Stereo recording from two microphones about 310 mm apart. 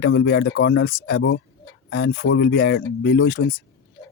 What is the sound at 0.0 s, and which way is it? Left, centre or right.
Speech, left.